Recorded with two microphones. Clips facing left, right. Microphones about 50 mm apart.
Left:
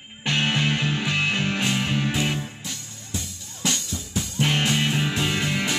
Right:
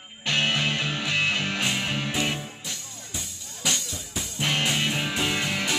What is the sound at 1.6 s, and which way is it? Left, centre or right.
Music, centre.